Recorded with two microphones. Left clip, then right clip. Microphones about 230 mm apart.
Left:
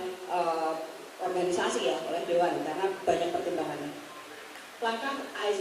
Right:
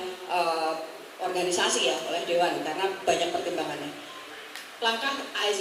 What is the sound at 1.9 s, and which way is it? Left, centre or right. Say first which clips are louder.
Speech: right 2 dB; left.